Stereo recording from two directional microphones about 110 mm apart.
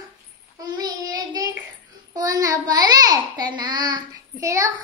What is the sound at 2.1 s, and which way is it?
Babbling, 30° right (ahead or behind).